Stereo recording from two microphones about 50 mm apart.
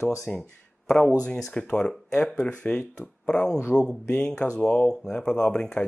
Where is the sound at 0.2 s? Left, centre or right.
Centre.